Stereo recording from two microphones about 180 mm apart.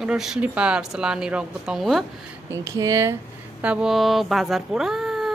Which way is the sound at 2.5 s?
15° right (ahead or behind).